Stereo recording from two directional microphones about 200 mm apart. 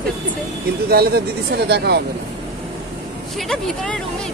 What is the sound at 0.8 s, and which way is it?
Speech, 50° right (ahead or behind).